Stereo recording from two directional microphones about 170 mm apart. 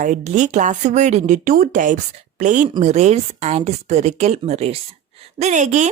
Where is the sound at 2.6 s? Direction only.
35° right (ahead or behind).